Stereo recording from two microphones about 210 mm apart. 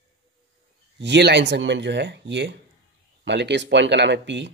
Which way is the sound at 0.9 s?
55° right (ahead or behind).